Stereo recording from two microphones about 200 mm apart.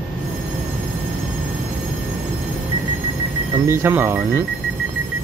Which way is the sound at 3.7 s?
10° right (ahead or behind).